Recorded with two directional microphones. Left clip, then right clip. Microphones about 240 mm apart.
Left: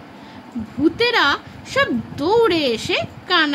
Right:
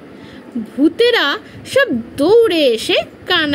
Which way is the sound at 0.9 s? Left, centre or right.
Centre.